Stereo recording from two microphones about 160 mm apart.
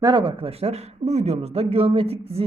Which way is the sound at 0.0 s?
30° right (ahead or behind).